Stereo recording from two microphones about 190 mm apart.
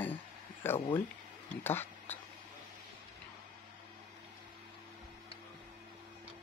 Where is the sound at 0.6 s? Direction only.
25° left (ahead or behind).